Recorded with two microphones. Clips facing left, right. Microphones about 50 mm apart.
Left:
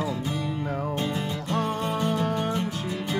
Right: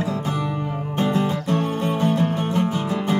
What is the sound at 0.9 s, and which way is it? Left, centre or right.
Music, right.